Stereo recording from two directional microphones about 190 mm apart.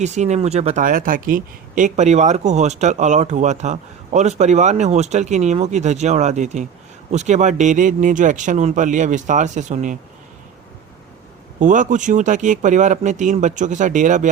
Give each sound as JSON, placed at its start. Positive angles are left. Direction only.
{"t": 0.0, "sound": "speech", "side_deg": -35}
{"t": 11.6, "sound": "speech", "side_deg": -40}